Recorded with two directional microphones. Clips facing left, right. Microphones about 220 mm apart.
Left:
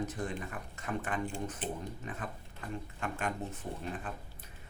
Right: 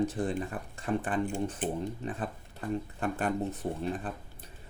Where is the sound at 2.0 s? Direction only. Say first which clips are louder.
Right 6 dB; 35° right (ahead or behind).